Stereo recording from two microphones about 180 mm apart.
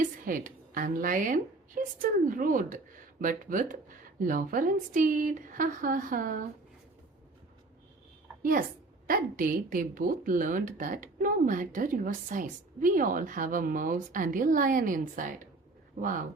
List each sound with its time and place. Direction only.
0.0 s a woman's voice: 50° right (ahead or behind)
8.4 s a woman's voice: 50° right (ahead or behind)